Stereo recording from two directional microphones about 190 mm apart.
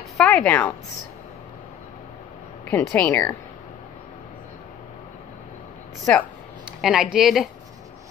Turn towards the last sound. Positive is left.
turn(degrees=0)  # may be behind; listen again after turning